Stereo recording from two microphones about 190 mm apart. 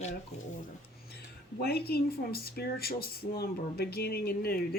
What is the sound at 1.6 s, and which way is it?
Speech, 55° left (ahead or behind).